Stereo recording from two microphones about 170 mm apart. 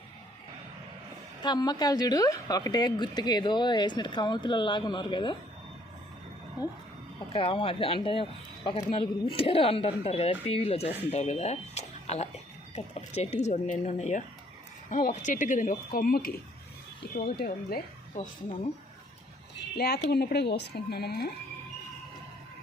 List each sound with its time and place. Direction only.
1.4 s a woman's voice: 25° left (ahead or behind)
7.3 s speech: 30° left (ahead or behind); by 17.7 s 60° left (ahead or behind)
19.5 s a sound: 70° left (ahead or behind)
20.1 s speech: 75° left (ahead or behind)